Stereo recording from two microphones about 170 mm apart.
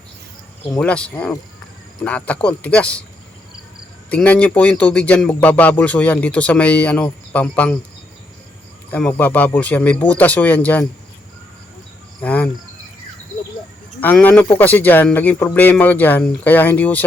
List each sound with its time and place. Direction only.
0.7 s speech: 5° left (ahead or behind)
4.1 s speech: 10° left (ahead or behind)
8.9 s speech: 10° left (ahead or behind)
12.2 s cricket: 10° left (ahead or behind)
14.0 s speech: 10° left (ahead or behind)